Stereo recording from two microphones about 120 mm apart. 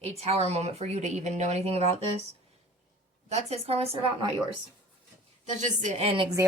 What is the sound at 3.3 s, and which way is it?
Speech, 65° right (ahead or behind).